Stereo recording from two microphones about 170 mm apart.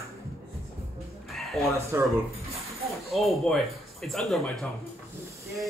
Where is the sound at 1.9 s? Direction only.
15° right (ahead or behind).